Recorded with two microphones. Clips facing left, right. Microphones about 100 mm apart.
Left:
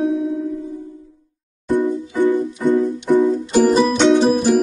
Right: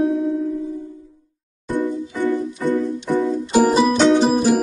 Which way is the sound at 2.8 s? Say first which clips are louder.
Left 5 dB; centre (ahead or behind).